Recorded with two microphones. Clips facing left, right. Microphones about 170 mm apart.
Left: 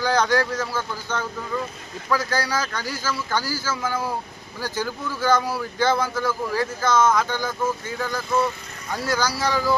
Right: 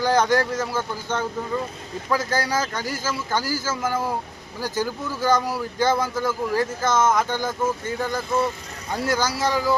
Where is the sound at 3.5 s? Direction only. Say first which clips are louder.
Right 1 dB; 45° right (ahead or behind).